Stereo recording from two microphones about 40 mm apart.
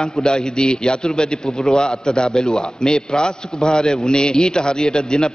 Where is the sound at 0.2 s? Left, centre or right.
Centre.